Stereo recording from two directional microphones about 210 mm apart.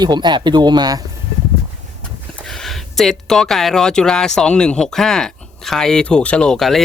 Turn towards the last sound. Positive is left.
turn(degrees=0)  # may be behind; listen again after turning